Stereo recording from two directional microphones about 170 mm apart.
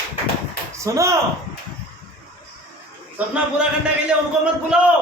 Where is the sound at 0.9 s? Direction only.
15° right (ahead or behind).